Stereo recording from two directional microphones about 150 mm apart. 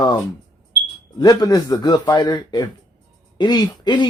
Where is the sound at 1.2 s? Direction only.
25° left (ahead or behind).